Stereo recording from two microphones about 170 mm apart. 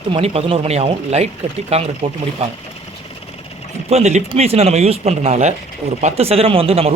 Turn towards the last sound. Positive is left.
turn(degrees=-35)  # may be behind; listen again after turning